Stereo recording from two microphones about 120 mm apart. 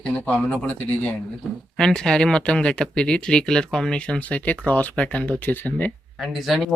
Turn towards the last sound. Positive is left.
turn(degrees=0)  # may be behind; listen again after turning